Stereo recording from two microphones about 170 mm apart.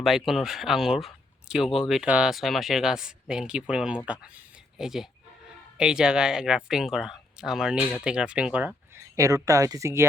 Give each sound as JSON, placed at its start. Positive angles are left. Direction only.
{"t": 0.0, "sound": "speech", "side_deg": 0}
{"t": 9.1, "sound": "speech", "side_deg": -20}